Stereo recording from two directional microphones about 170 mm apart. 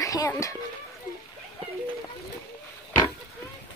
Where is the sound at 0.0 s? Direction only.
20° left (ahead or behind).